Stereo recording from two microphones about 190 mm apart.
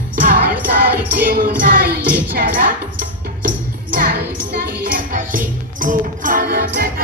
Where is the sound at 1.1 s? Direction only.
50° right (ahead or behind).